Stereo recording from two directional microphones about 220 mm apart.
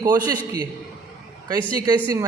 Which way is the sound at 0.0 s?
15° right (ahead or behind).